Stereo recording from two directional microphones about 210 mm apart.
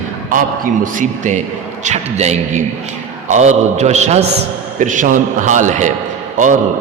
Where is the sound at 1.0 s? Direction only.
35° right (ahead or behind).